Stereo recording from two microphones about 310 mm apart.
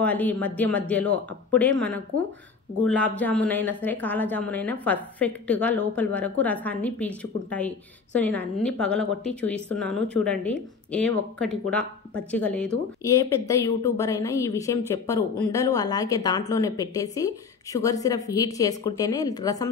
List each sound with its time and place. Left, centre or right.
0.0 s a woman's voice: centre
9.8 s speech: right
10.0 s a woman's voice: centre